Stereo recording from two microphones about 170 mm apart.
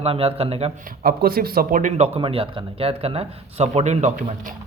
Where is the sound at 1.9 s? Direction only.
40° right (ahead or behind).